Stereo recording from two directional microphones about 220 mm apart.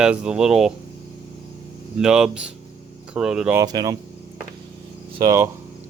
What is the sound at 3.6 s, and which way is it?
Speech, 15° right (ahead or behind).